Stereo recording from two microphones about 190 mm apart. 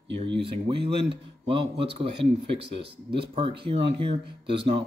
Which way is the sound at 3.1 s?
30° right (ahead or behind).